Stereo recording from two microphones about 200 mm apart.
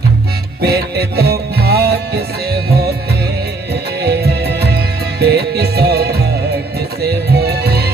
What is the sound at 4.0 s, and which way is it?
Music, 55° right (ahead or behind).